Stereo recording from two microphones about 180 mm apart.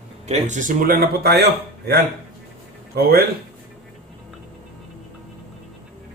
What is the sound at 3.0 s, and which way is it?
Speech, 55° right (ahead or behind).